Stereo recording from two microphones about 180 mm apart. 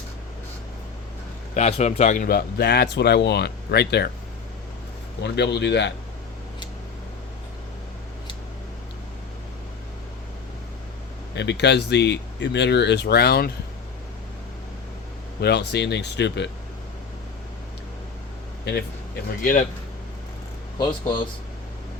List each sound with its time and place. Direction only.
1.5 s a man's voice: 35° left (ahead or behind); by 4.1 s 65° left (ahead or behind)
5.2 s speech: 70° left (ahead or behind)
11.3 s speech: 70° left (ahead or behind)
15.4 s speech: 65° left (ahead or behind)
19.4 s speech: 45° left (ahead or behind)
20.7 s speech: 25° left (ahead or behind)